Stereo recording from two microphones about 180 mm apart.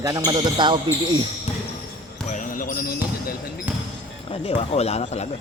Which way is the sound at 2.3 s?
50° left (ahead or behind).